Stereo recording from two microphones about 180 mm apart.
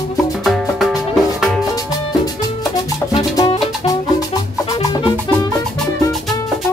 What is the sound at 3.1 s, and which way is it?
Music, 25° left (ahead or behind).